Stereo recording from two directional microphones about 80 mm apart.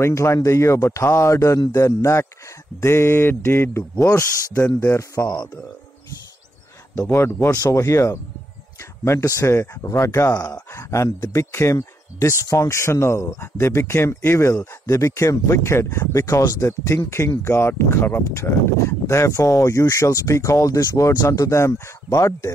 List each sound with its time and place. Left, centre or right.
0.0 s speech: left
2.8 s mantra: left
4.0 s speech: left
7.0 s speech: left